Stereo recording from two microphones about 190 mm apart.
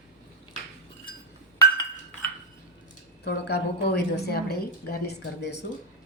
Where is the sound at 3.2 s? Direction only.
60° left (ahead or behind).